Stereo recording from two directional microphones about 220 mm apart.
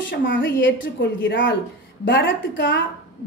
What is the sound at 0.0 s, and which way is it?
A woman's voice, 55° left (ahead or behind).